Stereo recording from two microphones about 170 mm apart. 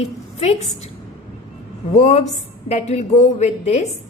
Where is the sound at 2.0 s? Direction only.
40° left (ahead or behind).